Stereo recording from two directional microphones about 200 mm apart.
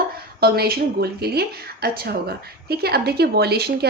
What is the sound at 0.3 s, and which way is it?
A woman's voice, 50° right (ahead or behind).